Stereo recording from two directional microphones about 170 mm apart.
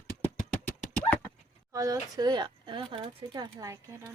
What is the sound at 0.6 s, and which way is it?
Horse, 10° left (ahead or behind).